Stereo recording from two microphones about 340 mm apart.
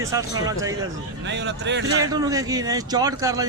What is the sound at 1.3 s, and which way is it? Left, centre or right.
Speech, right.